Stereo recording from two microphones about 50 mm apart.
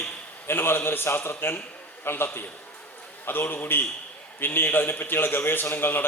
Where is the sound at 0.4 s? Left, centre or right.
Left.